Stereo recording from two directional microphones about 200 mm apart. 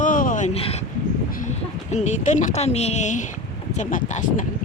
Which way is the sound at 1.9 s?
35° left (ahead or behind).